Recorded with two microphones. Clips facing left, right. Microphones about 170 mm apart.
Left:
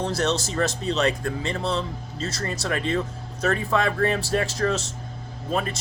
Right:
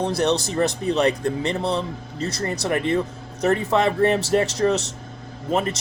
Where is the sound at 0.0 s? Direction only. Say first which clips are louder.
Right 3 dB; 15° right (ahead or behind).